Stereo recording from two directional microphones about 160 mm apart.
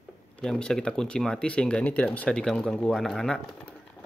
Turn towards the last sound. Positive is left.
turn(degrees=5)  # may be behind; listen again after turning